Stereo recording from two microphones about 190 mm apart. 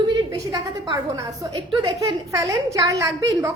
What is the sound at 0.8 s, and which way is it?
A woman's voice, 20° right (ahead or behind).